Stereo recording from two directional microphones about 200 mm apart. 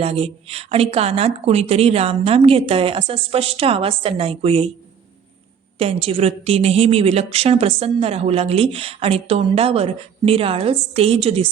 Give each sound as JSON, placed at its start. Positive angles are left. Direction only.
{"t": 0.0, "sound": "a woman's voice", "side_deg": -30}
{"t": 5.8, "sound": "a woman's voice", "side_deg": -30}